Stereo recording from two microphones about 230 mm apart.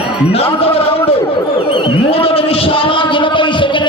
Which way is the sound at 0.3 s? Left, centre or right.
Left.